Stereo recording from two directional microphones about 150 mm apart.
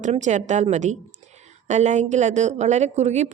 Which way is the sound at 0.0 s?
55° right (ahead or behind).